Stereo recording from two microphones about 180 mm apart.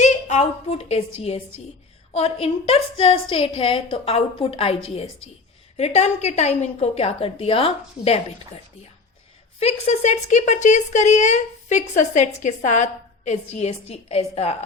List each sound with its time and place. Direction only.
0.0 s a woman's voice: 40° left (ahead or behind)
9.6 s a woman's voice: 35° left (ahead or behind)